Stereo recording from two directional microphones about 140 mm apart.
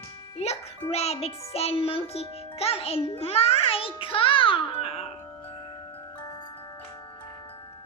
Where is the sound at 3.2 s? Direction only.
45° left (ahead or behind).